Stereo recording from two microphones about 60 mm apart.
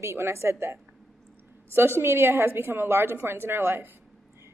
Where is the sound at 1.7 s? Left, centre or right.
Right.